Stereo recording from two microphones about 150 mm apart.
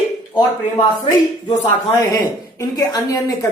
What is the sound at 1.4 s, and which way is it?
Speech, 25° left (ahead or behind).